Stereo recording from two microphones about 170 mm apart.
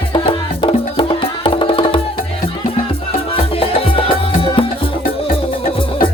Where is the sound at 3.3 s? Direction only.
30° left (ahead or behind).